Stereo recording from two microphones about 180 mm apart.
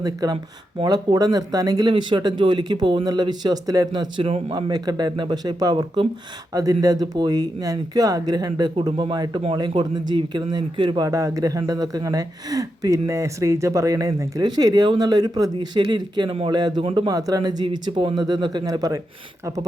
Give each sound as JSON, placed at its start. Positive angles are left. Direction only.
{"t": 0.0, "sound": "speech", "side_deg": -20}